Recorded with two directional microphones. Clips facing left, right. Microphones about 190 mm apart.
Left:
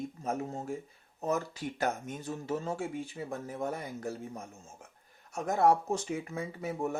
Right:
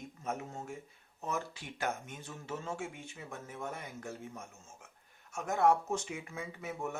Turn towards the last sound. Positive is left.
turn(degrees=35)  # may be behind; listen again after turning